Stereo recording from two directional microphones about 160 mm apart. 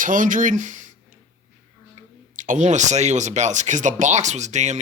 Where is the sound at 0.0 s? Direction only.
55° right (ahead or behind).